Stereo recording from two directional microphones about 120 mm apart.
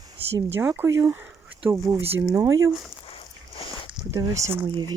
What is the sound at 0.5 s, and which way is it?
Speech, 15° right (ahead or behind).